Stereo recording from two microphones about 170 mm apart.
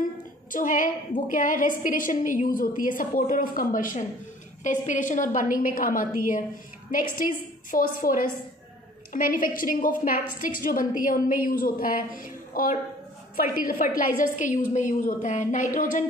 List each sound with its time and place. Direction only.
0.5 s a woman's voice: 50° left (ahead or behind)